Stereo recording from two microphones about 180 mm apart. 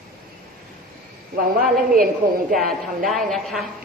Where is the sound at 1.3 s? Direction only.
55° right (ahead or behind).